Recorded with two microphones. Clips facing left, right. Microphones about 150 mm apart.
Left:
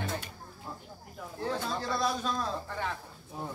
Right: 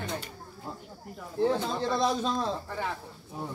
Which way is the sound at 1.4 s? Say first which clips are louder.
Right 7 dB; 20° right (ahead or behind).